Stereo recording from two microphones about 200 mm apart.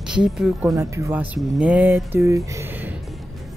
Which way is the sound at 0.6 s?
15° right (ahead or behind).